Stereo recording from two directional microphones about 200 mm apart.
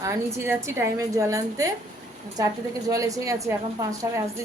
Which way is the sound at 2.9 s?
15° right (ahead or behind).